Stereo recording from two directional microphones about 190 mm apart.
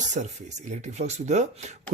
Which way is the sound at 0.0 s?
40° right (ahead or behind).